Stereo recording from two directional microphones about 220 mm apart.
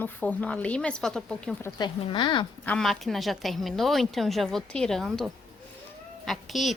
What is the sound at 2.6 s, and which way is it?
A woman's voice, centre (ahead or behind).